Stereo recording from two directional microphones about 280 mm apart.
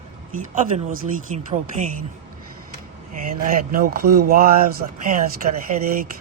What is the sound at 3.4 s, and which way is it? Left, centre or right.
Speech, right.